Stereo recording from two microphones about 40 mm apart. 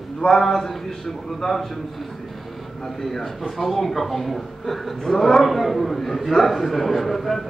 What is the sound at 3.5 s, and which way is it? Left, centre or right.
A woman's voice, centre.